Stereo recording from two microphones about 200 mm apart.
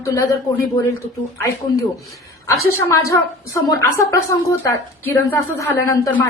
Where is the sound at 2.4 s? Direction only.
15° left (ahead or behind).